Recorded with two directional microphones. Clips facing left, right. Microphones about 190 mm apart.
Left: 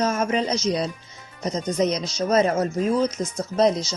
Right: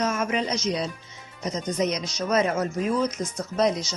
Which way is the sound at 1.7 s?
30° left (ahead or behind).